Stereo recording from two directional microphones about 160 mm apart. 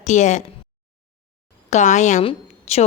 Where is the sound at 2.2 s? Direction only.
40° left (ahead or behind).